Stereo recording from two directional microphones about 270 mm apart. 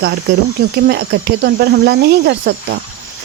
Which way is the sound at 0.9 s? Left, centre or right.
Right.